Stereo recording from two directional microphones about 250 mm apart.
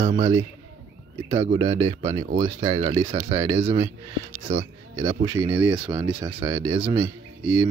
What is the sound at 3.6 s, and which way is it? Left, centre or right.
Speech, right.